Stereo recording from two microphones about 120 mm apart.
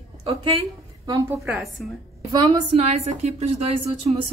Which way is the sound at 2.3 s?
40° right (ahead or behind).